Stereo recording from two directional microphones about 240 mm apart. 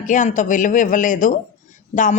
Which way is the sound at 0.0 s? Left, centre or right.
Left.